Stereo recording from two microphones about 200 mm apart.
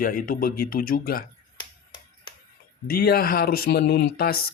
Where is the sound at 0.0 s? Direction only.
45° left (ahead or behind).